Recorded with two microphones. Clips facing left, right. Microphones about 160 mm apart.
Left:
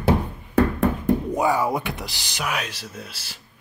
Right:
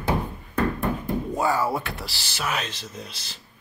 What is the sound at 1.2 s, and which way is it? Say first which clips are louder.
Speech: left 2 dB; 15° left (ahead or behind).